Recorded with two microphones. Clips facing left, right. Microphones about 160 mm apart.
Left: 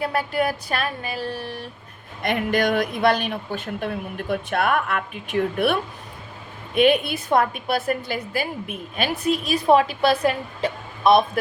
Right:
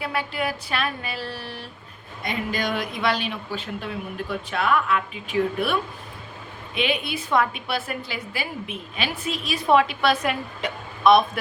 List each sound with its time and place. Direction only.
0.0 s a woman's voice: 45° left (ahead or behind)
2.2 s a woman's voice: 55° left (ahead or behind)
6.7 s a woman's voice: 50° left (ahead or behind)